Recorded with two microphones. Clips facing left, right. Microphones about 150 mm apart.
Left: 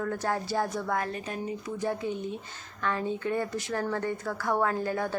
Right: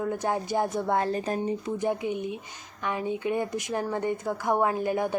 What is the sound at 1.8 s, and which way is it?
Speech, 15° right (ahead or behind).